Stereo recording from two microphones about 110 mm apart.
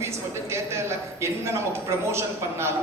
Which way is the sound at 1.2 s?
25° right (ahead or behind).